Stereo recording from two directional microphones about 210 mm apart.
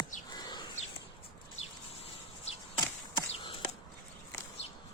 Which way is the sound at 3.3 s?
25° left (ahead or behind).